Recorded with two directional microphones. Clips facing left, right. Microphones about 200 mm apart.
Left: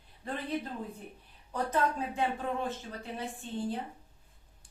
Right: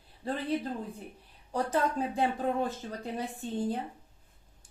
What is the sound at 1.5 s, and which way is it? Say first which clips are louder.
Speech: right 2 dB; 35° right (ahead or behind).